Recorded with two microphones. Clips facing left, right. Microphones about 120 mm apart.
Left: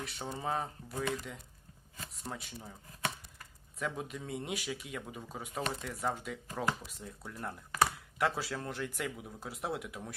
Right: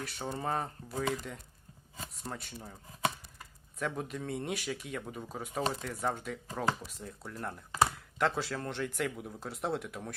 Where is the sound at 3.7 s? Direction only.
Centre (ahead or behind).